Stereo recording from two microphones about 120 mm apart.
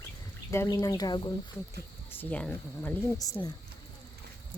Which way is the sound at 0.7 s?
30° left (ahead or behind).